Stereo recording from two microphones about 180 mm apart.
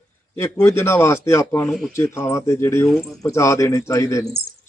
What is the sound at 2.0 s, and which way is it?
Speech, 15° left (ahead or behind).